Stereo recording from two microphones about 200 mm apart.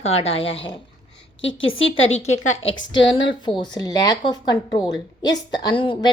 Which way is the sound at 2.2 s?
35° left (ahead or behind).